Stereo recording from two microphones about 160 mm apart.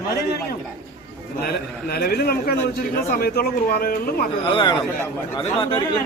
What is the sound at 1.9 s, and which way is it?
Speech, 75° left (ahead or behind).